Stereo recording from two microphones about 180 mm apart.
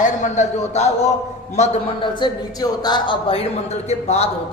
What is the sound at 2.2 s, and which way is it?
A woman's voice, 20° left (ahead or behind).